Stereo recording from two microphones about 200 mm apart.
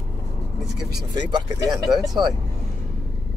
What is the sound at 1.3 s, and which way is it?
Speech, 20° right (ahead or behind).